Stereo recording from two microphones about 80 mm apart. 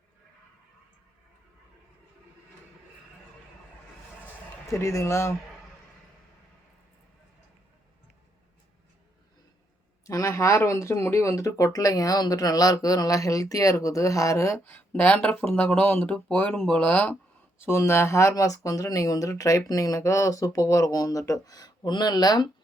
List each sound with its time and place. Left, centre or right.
4.7 s speech: left
10.0 s speech: left
14.6 s speech: left
17.7 s speech: left